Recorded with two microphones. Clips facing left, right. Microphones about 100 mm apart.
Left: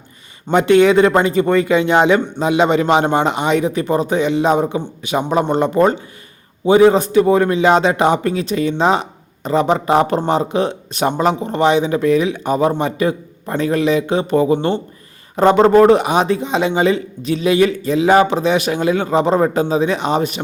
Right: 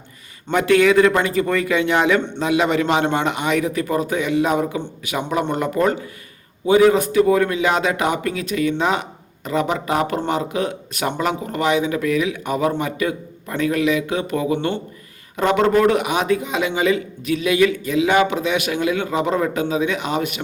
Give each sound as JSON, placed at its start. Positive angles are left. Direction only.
{"t": 0.5, "sound": "a man's voice", "side_deg": 25}